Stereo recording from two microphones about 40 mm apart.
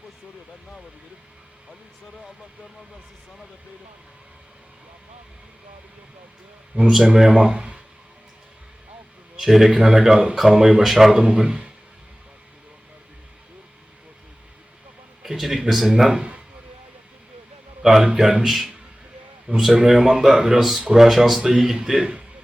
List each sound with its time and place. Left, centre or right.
6.7 s speech: right
7.3 s speech: centre
9.3 s a man's voice: centre
11.2 s speech: centre
15.2 s a man's voice: centre
17.8 s a man's voice: centre
18.4 s a man's voice: centre